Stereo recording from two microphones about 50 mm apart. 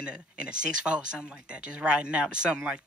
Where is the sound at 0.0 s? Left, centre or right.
Centre.